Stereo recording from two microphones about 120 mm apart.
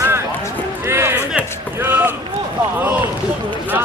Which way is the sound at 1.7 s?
15° right (ahead or behind).